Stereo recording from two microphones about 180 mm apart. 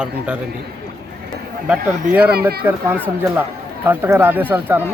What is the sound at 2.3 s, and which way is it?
Speech, 60° right (ahead or behind).